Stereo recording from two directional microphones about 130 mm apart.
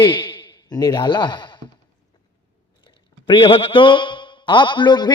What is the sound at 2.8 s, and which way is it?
A man's voice, 40° left (ahead or behind).